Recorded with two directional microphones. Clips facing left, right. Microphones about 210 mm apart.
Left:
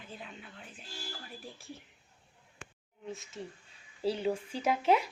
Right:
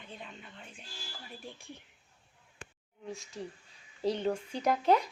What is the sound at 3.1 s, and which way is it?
Speech, centre (ahead or behind).